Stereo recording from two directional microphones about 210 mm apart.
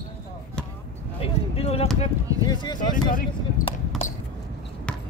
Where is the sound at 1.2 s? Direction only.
30° left (ahead or behind).